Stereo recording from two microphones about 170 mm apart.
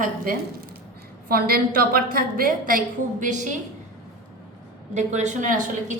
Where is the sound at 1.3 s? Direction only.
60° right (ahead or behind).